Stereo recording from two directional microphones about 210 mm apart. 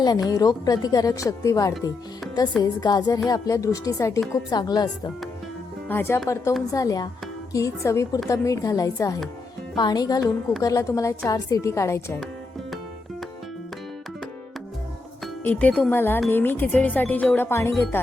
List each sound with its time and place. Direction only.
0.0 s speech: 20° left (ahead or behind)
2.2 s music: centre (ahead or behind)
2.6 s a woman's voice: 20° left (ahead or behind)
5.9 s a woman's voice: 10° left (ahead or behind)
15.2 s speech: 5° left (ahead or behind)